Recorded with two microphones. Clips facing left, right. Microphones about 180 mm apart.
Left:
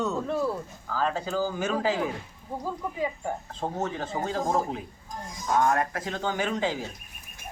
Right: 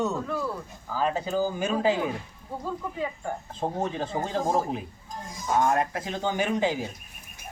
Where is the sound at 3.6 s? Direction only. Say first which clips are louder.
Right 2 dB; 20° right (ahead or behind).